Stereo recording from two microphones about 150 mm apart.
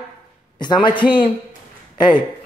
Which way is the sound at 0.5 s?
30° left (ahead or behind).